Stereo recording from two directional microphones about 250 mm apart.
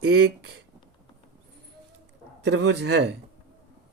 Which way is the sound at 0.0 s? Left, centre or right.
Right.